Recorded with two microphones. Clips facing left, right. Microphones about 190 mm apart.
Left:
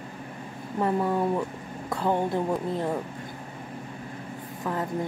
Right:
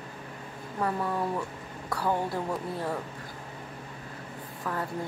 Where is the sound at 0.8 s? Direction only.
25° left (ahead or behind).